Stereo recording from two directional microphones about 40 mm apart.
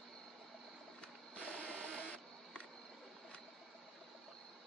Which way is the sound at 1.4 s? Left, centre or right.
Left.